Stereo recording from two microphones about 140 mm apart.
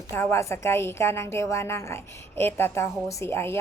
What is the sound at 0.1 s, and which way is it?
A woman's voice, 15° left (ahead or behind).